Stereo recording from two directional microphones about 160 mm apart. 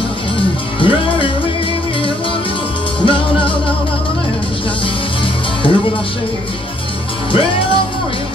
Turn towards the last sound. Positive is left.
turn(degrees=35)  # may be behind; listen again after turning